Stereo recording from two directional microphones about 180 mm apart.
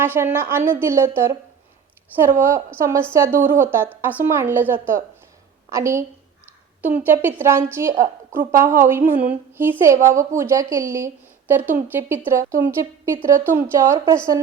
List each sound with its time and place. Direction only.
0.0 s a woman's voice: 10° right (ahead or behind)